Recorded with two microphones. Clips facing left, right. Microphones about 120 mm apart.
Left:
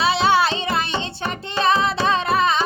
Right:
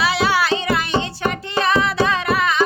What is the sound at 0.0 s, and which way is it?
Music, 25° left (ahead or behind).